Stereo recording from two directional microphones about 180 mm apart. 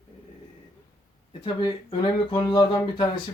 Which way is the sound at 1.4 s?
25° left (ahead or behind).